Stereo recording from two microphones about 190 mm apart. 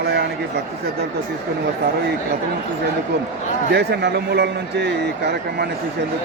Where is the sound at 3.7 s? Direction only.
60° right (ahead or behind).